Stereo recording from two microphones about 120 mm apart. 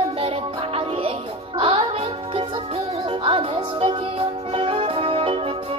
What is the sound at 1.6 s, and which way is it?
Music, 50° right (ahead or behind).